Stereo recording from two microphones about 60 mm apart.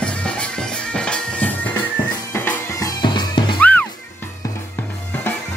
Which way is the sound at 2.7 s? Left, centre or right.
Left.